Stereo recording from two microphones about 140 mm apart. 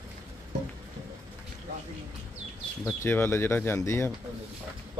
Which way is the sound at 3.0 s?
15° left (ahead or behind).